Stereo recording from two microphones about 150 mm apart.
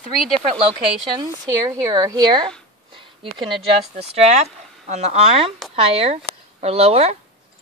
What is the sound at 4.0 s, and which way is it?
Speech, 45° right (ahead or behind).